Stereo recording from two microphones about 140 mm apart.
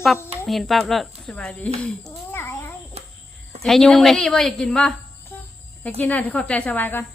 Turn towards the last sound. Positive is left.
turn(degrees=15)  # may be behind; listen again after turning